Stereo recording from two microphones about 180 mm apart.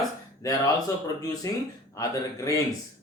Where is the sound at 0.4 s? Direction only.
20° left (ahead or behind).